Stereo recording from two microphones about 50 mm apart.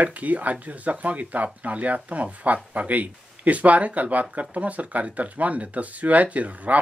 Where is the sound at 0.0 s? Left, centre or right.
Right.